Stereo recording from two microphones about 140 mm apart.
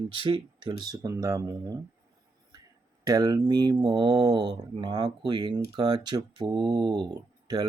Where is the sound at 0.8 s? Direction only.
25° right (ahead or behind).